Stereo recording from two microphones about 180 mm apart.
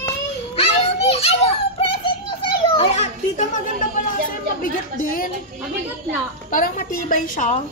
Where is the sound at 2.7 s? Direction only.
40° left (ahead or behind).